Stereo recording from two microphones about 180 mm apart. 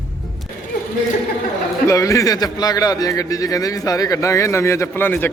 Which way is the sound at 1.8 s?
15° left (ahead or behind).